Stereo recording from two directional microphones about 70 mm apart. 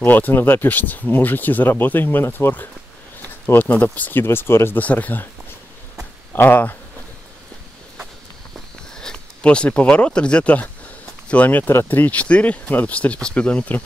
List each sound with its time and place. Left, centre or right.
0.0 s speech: left
3.5 s speech: left
4.7 s speech: left
6.3 s speech: left
8.5 s a sound: centre
11.2 s speech: left